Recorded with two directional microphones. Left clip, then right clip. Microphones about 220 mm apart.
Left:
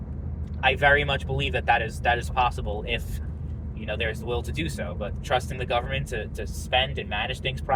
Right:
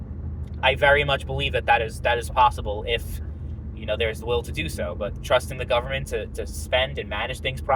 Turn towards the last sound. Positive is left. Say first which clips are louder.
# right 2 dB
turn(degrees=-25)  # may be behind; listen again after turning